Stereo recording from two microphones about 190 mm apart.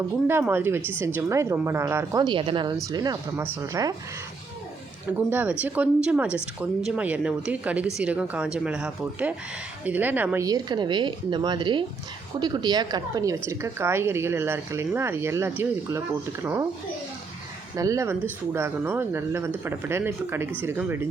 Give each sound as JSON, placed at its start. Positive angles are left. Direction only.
{"t": 0.3, "sound": "speech", "side_deg": -10}
{"t": 2.2, "sound": "a woman's voice", "side_deg": -25}
{"t": 5.3, "sound": "a woman's voice", "side_deg": -10}
{"t": 17.7, "sound": "speech", "side_deg": -15}